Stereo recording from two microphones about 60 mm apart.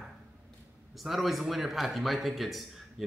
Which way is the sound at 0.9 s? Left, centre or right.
Centre.